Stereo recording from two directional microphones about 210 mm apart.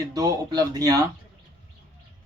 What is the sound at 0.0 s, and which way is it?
Speech, 15° right (ahead or behind).